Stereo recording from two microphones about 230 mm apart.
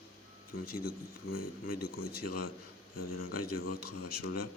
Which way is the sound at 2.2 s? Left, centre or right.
Left.